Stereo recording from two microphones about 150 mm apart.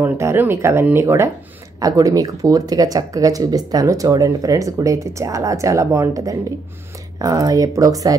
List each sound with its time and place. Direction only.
0.0 s speech: 15° right (ahead or behind)